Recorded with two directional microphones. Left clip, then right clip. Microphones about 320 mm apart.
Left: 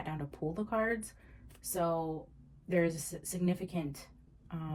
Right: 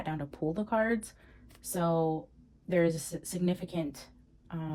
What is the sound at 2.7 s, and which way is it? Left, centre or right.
Speech, right.